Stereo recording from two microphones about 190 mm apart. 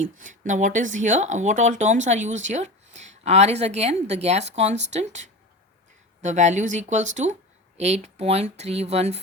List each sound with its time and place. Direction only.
0.0 s speech: 40° right (ahead or behind)